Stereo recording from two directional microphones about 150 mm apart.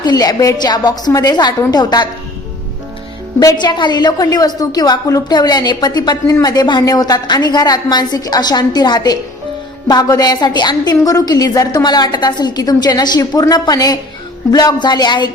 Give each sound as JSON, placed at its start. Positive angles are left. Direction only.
{"t": 0.0, "sound": "a woman's voice", "side_deg": 25}
{"t": 3.4, "sound": "a woman's voice", "side_deg": 30}